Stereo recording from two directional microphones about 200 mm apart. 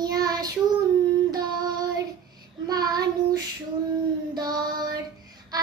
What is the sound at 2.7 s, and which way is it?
Child singing, 20° right (ahead or behind).